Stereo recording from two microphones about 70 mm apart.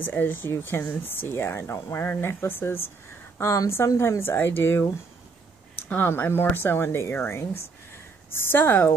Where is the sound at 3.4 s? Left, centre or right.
Left.